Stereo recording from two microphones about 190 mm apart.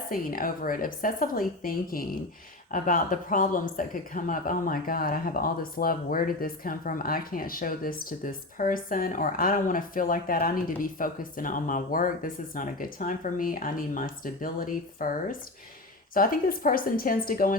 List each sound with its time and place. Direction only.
0.1 s speech: 50° left (ahead or behind)